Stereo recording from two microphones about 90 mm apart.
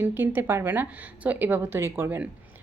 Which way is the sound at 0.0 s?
25° right (ahead or behind).